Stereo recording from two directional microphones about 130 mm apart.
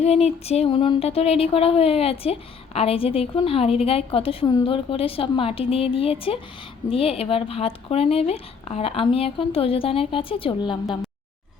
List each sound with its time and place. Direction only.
0.0 s speech: 55° left (ahead or behind); by 10.9 s 35° left (ahead or behind)